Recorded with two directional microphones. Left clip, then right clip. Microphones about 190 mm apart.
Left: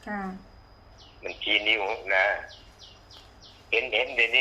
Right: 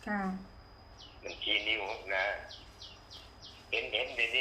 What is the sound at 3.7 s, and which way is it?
Speech, 55° left (ahead or behind).